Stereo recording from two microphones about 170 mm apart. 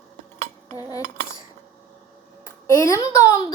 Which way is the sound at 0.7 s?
20° left (ahead or behind).